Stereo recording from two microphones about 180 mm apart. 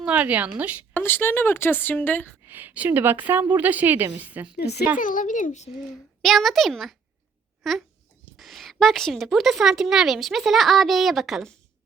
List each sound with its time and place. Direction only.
0.0 s a woman's voice: 5° right (ahead or behind)
0.9 s a woman's voice: 10° left (ahead or behind)
2.5 s a woman's voice: 10° right (ahead or behind)
4.5 s speech: 65° left (ahead or behind)
4.9 s speech: 50° left (ahead or behind)
6.2 s a child's voice: centre (ahead or behind)